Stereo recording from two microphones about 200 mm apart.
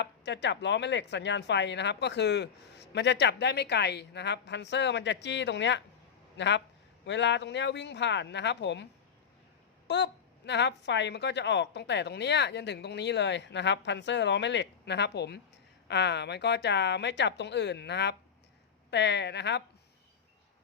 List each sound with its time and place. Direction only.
0.0 s a man's voice: 60° left (ahead or behind)